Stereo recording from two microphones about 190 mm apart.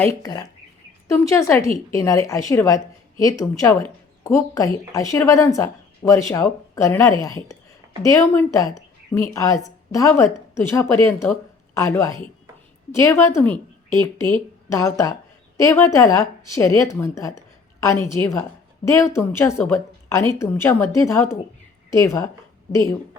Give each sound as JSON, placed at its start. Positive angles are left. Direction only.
{"t": 0.0, "sound": "a woman's voice", "side_deg": 15}
{"t": 14.7, "sound": "speech", "side_deg": 15}